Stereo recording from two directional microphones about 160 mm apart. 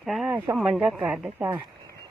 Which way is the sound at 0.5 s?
5° right (ahead or behind).